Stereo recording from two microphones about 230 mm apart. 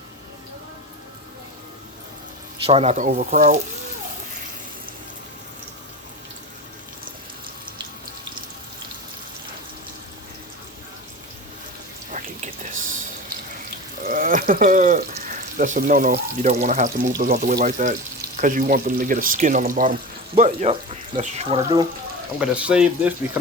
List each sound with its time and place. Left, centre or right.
2.6 s speech: right
12.7 s drip: right
14.1 s speech: right
22.4 s speech: centre